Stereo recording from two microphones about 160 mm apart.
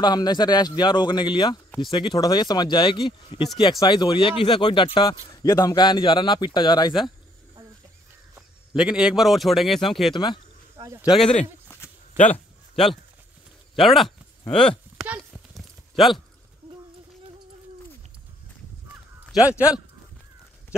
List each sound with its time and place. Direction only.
0.0 s speech: 25° left (ahead or behind)
8.7 s a man's voice: 5° right (ahead or behind)
10.1 s speech: 30° left (ahead or behind)
10.8 s speech: 20° right (ahead or behind)
11.1 s a man's voice: centre (ahead or behind)
12.7 s a man's voice: centre (ahead or behind)
14.5 s a sound: 5° left (ahead or behind)